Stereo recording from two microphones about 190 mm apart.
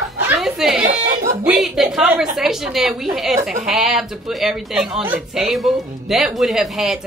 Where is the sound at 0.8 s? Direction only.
40° right (ahead or behind).